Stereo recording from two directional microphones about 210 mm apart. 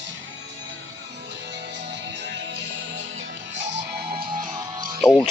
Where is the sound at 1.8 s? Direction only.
55° right (ahead or behind); by 5.0 s 40° right (ahead or behind).